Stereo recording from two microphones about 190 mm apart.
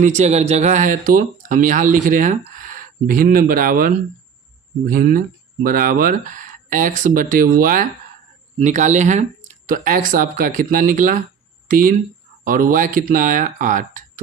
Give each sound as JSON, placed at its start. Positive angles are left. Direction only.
{"t": 0.0, "sound": "speech", "side_deg": -40}